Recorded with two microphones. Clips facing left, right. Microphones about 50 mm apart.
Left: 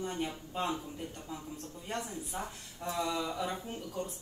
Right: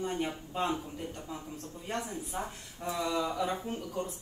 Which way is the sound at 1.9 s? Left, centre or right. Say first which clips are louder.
Right 2 dB; right.